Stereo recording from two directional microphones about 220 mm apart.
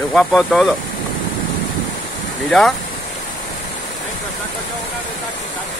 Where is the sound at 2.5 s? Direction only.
Centre (ahead or behind).